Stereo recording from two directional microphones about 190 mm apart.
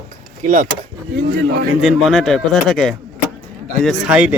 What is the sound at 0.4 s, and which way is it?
Speech, 45° right (ahead or behind).